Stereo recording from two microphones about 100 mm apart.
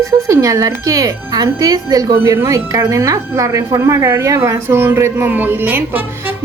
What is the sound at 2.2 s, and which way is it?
A woman's voice, 25° right (ahead or behind).